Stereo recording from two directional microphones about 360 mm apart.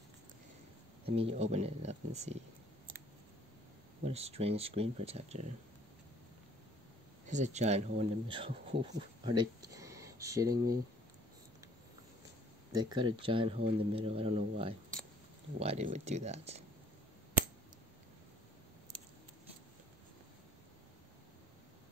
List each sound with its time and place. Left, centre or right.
1.0 s speech: centre
4.0 s speech: centre
7.2 s speech: centre
12.7 s speech: centre